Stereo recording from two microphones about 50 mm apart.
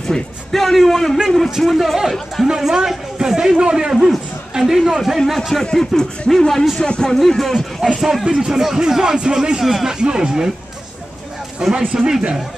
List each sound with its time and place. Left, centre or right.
0.1 s a man's voice: centre
2.4 s a man's voice: centre
5.6 s speech: centre
6.8 s speech: centre
7.2 s a man's voice: centre
9.7 s a man's voice: centre
9.9 s speech: centre
11.9 s speech: centre